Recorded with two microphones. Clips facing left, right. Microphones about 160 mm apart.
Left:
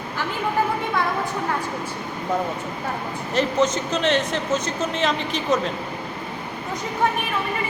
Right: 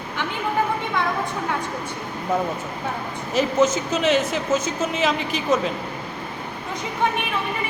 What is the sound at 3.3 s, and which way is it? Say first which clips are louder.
A man's voice: right 2 dB; 5° right (ahead or behind).